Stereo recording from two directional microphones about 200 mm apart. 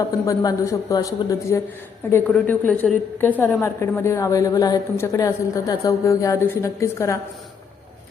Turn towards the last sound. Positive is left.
turn(degrees=15)  # may be behind; listen again after turning